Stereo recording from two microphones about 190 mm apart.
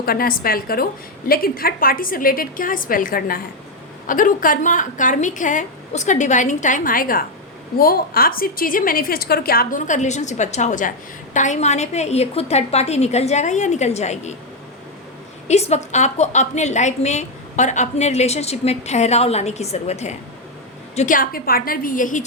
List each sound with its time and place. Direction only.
0.0 s a woman's voice: 50° left (ahead or behind)
15.4 s a woman's voice: 35° left (ahead or behind)